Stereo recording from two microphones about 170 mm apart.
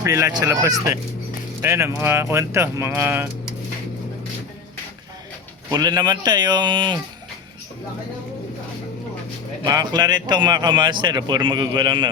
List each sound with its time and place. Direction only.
0.0 s speech: 15° right (ahead or behind)
5.7 s speech: 25° right (ahead or behind)
9.6 s speech: 25° right (ahead or behind)